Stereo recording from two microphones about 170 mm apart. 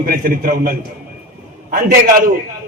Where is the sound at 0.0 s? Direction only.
60° right (ahead or behind).